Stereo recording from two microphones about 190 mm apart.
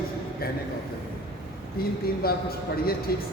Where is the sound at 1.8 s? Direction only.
55° left (ahead or behind).